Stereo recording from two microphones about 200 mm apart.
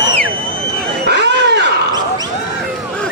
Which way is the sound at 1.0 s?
60° right (ahead or behind).